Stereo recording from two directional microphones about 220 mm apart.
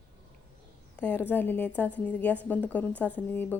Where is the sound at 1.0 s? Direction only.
10° left (ahead or behind).